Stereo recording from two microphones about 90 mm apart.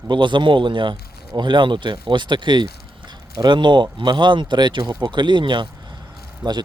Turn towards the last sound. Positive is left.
turn(degrees=-55)  # may be behind; listen again after turning